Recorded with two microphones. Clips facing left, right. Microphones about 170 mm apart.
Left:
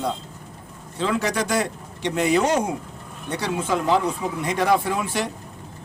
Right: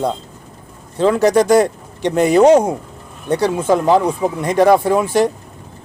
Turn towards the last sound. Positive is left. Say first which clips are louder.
# right 10 dB
turn(degrees=-40)  # may be behind; listen again after turning